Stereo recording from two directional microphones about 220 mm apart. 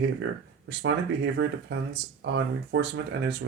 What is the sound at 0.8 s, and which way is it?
Speech, 50° right (ahead or behind).